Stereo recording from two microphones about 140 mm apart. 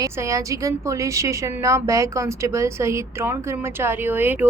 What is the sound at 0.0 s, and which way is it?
A woman's voice, 25° right (ahead or behind).